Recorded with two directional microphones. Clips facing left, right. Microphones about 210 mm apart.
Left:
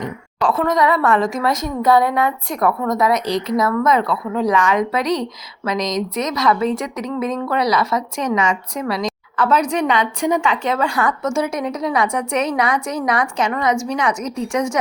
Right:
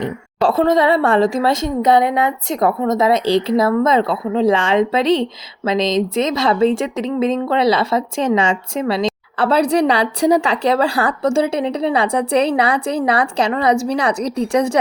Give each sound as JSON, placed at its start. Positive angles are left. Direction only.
{"t": 0.0, "sound": "a woman's voice", "side_deg": -30}